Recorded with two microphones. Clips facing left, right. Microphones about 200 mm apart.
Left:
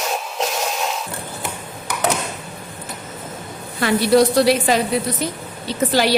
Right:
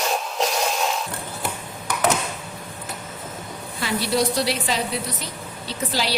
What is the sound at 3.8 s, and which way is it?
A woman's voice, 50° left (ahead or behind).